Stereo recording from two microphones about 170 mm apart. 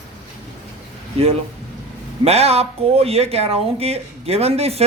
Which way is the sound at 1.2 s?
35° right (ahead or behind).